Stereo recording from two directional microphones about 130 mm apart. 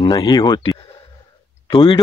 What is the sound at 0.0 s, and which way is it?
Speech, 35° left (ahead or behind).